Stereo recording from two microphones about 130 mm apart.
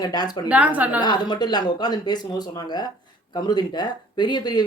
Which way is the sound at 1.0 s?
35° left (ahead or behind).